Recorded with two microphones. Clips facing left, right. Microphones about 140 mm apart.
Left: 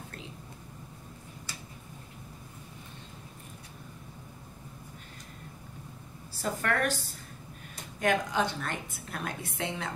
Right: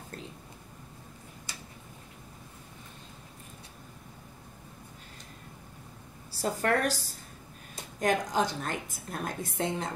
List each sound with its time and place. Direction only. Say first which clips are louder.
6.3 s a woman's voice: right 3 dB; 35° right (ahead or behind)
8.0 s a woman's voice: even; 40° right (ahead or behind)